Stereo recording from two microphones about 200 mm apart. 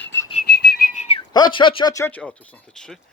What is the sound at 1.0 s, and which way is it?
Speech, 25° left (ahead or behind).